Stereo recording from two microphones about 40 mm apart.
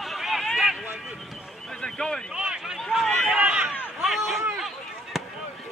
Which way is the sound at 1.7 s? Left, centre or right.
Centre.